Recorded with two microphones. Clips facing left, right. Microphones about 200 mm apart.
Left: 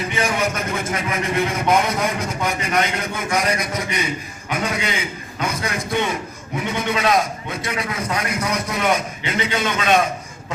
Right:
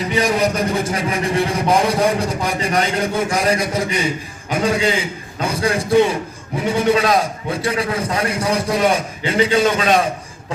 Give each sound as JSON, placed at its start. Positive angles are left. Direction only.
{"t": 0.1, "sound": "a man's voice", "side_deg": -35}